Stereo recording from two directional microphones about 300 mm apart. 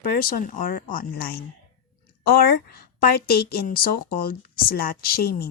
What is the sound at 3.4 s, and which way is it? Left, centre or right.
Speech, left.